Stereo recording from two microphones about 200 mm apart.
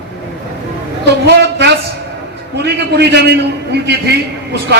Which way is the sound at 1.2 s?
55° right (ahead or behind).